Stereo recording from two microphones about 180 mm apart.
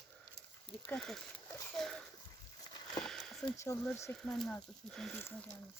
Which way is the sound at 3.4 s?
15° left (ahead or behind).